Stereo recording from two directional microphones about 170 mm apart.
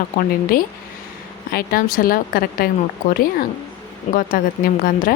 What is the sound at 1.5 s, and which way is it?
Speech, 60° left (ahead or behind).